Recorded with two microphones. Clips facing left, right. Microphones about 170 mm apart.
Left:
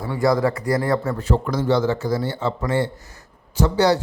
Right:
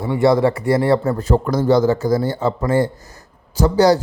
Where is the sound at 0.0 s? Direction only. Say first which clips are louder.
Right 4 dB; 25° right (ahead or behind).